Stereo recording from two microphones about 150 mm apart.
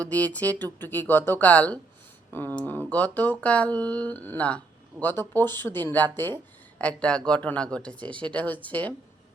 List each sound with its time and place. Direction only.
0.0 s speech: 10° left (ahead or behind)